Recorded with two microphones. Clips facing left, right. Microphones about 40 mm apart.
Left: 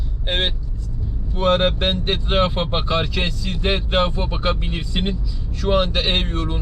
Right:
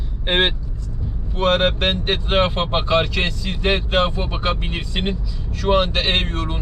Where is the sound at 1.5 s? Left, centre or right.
Right.